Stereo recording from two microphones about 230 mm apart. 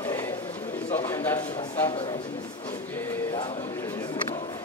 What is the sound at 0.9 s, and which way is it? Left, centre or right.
A man's voice, centre.